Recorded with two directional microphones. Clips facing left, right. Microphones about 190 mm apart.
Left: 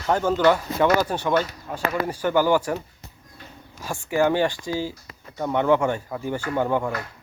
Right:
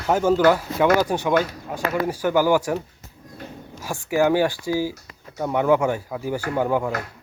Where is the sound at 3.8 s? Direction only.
10° right (ahead or behind).